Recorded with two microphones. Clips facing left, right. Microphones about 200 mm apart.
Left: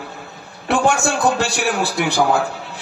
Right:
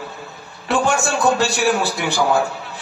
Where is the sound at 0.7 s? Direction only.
60° left (ahead or behind).